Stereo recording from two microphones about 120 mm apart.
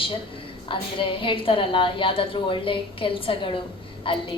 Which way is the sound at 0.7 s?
45° left (ahead or behind).